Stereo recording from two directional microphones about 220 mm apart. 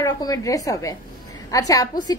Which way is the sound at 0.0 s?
15° left (ahead or behind).